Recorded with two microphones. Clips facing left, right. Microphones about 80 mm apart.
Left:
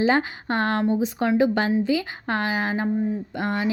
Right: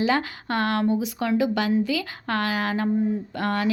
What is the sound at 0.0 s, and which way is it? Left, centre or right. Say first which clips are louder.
A woman's voice: left 2 dB; left.